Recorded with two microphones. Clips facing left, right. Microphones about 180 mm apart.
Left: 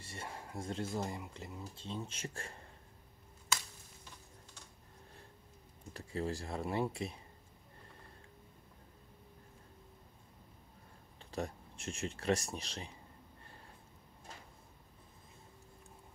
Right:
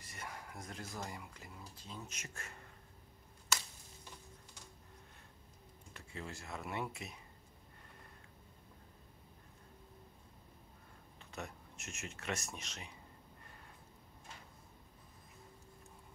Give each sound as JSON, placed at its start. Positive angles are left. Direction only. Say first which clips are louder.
{"t": 0.0, "sound": "speech", "louder": "left 3 dB", "side_deg": 30}
{"t": 5.9, "sound": "speech", "louder": "left 9 dB", "side_deg": 35}
{"t": 11.1, "sound": "speech", "louder": "left 7 dB", "side_deg": 35}